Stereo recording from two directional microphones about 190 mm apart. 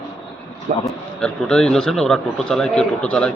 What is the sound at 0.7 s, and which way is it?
Speech, 45° right (ahead or behind).